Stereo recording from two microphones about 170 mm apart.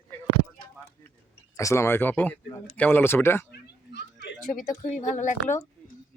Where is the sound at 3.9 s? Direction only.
90° left.